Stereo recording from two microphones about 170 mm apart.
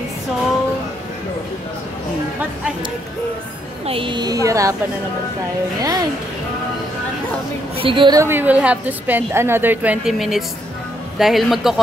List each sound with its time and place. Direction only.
3.8 s a woman's voice: 30° right (ahead or behind)
5.8 s a woman's voice: 20° right (ahead or behind)
7.7 s a woman's voice: 30° right (ahead or behind)
8.2 s a woman's voice: 10° right (ahead or behind)